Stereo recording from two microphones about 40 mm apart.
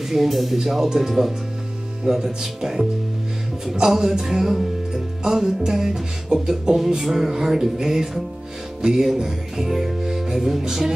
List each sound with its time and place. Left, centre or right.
0.1 s music: centre